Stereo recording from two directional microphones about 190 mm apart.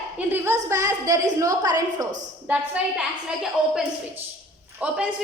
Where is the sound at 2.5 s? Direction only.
5° right (ahead or behind).